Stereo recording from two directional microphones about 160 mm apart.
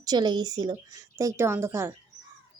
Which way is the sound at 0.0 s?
25° right (ahead or behind).